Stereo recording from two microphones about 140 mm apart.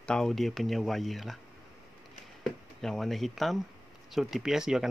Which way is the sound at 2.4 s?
5° left (ahead or behind).